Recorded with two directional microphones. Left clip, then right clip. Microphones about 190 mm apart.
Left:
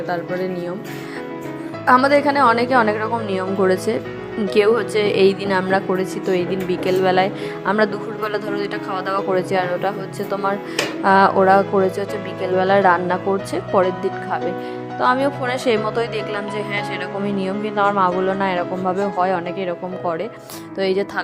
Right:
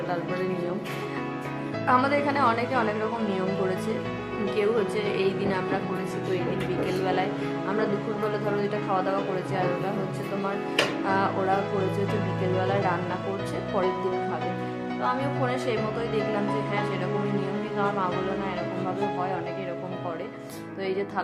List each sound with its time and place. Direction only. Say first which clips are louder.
1.9 s a woman's voice: left 9 dB; 40° left (ahead or behind)
7.0 s speech: left 11 dB; 50° left (ahead or behind)
8.3 s speech: left 5 dB; 50° left (ahead or behind)
11.0 s speech: left 12 dB; 50° left (ahead or behind)
15.0 s speech: left 10 dB; 50° left (ahead or behind)
20.7 s speech: left 10 dB; 45° left (ahead or behind)